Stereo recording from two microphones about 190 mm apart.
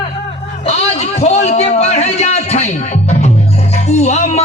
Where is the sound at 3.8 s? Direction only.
35° left (ahead or behind).